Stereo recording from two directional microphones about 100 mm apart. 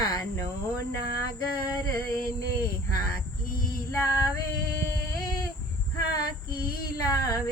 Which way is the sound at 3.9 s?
30° left (ahead or behind).